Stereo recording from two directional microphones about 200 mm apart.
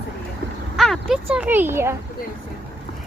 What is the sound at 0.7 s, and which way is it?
Vehicle, centre (ahead or behind).